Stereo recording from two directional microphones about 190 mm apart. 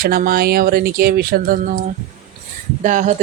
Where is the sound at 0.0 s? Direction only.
50° right (ahead or behind).